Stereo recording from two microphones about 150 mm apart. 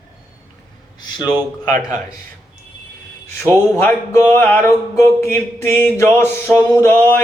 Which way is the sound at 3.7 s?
15° left (ahead or behind).